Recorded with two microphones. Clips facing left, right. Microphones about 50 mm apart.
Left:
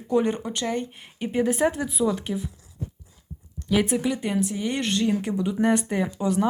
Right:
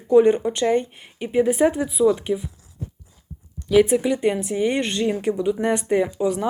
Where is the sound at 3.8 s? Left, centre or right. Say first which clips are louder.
Right 4 dB; centre.